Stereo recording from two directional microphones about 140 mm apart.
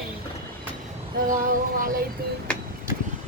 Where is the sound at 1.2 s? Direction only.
75° right (ahead or behind).